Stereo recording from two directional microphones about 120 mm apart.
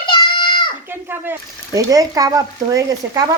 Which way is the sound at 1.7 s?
30° right (ahead or behind).